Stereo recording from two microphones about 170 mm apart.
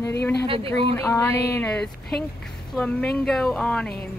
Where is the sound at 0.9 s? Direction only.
15° left (ahead or behind).